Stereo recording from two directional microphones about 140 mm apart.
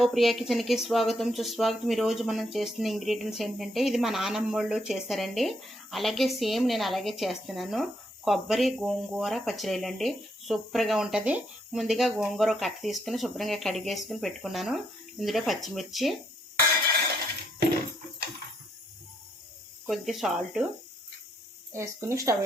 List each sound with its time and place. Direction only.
0.0 s speech: centre (ahead or behind)
19.9 s speech: centre (ahead or behind)
21.7 s speech: 20° right (ahead or behind)